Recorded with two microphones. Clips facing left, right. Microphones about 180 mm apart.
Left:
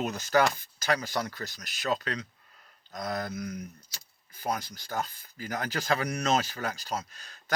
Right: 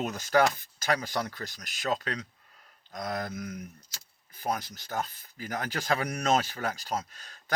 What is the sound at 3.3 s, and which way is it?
Speech, 40° left (ahead or behind).